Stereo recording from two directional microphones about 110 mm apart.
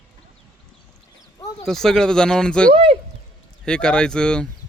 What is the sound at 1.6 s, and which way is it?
Speech, 5° left (ahead or behind).